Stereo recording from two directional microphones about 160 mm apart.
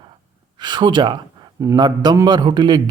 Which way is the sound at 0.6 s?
30° right (ahead or behind).